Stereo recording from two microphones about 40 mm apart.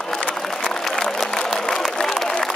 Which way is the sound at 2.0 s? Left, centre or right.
Centre.